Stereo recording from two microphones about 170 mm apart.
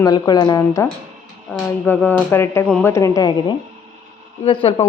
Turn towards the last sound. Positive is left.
turn(degrees=30)  # may be behind; listen again after turning